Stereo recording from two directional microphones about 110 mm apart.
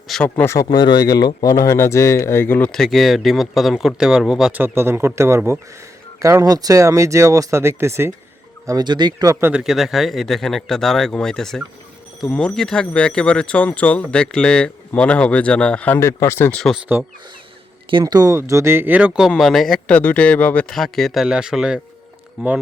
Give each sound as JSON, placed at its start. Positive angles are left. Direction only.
{"t": 0.1, "sound": "speech", "side_deg": 10}
{"t": 0.4, "sound": "speech", "side_deg": 30}
{"t": 2.7, "sound": "speech", "side_deg": 0}
{"t": 4.6, "sound": "speech", "side_deg": -20}
{"t": 8.6, "sound": "speech", "side_deg": -35}
{"t": 9.5, "sound": "speech", "side_deg": -5}
{"t": 16.0, "sound": "speech", "side_deg": 25}
{"t": 16.5, "sound": "speech", "side_deg": 10}
{"t": 18.0, "sound": "speech", "side_deg": -35}
{"t": 19.4, "sound": "speech", "side_deg": 0}
{"t": 20.0, "sound": "speech", "side_deg": 15}
{"t": 20.7, "sound": "speech", "side_deg": 5}